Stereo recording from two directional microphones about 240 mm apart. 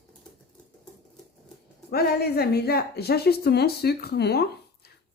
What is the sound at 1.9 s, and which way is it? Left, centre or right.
A woman's voice, left.